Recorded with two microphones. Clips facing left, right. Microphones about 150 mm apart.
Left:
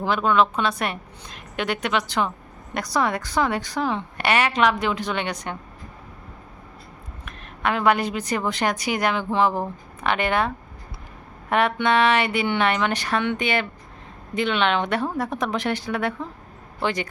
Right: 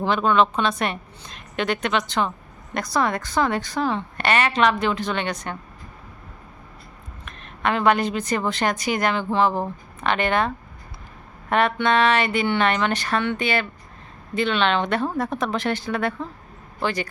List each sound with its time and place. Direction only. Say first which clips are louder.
0.0 s a woman's voice: right 1 dB; 10° left (ahead or behind)
7.3 s a woman's voice: right 1 dB; 10° left (ahead or behind)